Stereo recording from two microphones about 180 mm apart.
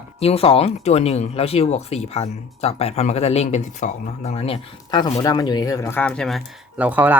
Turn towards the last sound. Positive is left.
turn(degrees=-10)  # may be behind; listen again after turning